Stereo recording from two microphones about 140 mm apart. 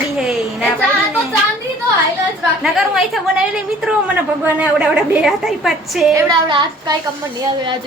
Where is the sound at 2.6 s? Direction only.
Centre (ahead or behind).